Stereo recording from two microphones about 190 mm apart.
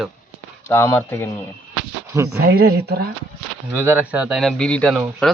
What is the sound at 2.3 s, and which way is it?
Speech, 55° right (ahead or behind).